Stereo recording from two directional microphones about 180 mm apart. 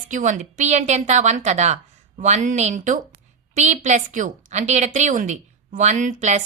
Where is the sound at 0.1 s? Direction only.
45° right (ahead or behind).